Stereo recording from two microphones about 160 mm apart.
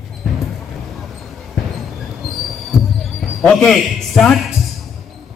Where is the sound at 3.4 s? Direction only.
5° left (ahead or behind).